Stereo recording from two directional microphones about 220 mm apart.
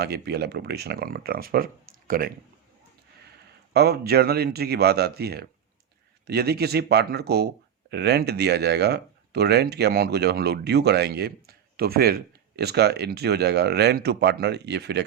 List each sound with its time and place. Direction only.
0.0 s speech: 45° right (ahead or behind)
3.7 s speech: 45° right (ahead or behind)